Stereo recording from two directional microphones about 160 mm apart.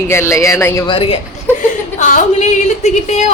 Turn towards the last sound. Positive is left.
turn(degrees=45)  # may be behind; listen again after turning